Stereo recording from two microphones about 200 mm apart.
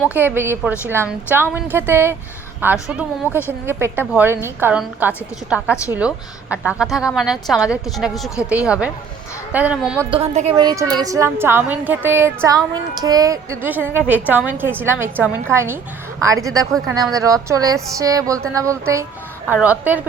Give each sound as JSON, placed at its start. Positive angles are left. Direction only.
{"t": 0.1, "sound": "a woman's voice", "side_deg": -10}
{"t": 10.1, "sound": "a woman's voice", "side_deg": -30}
{"t": 10.5, "sound": "a woman's voice", "side_deg": -20}